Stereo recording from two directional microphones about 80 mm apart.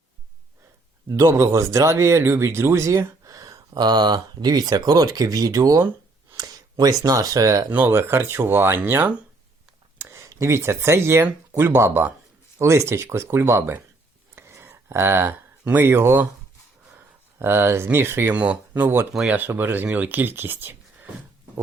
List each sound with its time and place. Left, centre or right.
1.1 s speech: right
7.7 s speech: right
10.0 s speech: right
14.3 s whispering: right
15.6 s speech: right
17.4 s speech: right
18.3 s speech: centre
19.1 s speech: centre
19.4 s speech: right